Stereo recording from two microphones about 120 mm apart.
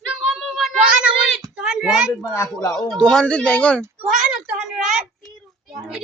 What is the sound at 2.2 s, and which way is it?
Speech, 30° left (ahead or behind).